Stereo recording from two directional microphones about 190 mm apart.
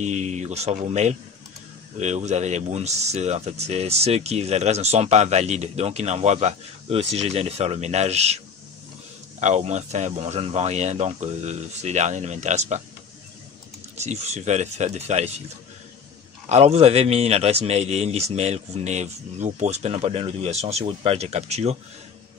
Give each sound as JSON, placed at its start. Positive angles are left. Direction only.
{"t": 0.0, "sound": "speech", "side_deg": -40}
{"t": 9.4, "sound": "speech", "side_deg": -35}
{"t": 13.9, "sound": "speech", "side_deg": -35}
{"t": 16.4, "sound": "speech", "side_deg": -35}